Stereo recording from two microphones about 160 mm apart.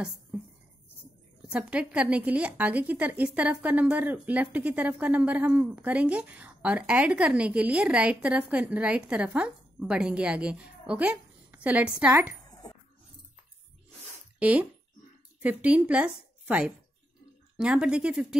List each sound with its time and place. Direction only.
1.5 s a woman's voice: 5° right (ahead or behind)
12.4 s dog: 25° left (ahead or behind)
14.4 s a woman's voice: 10° right (ahead or behind)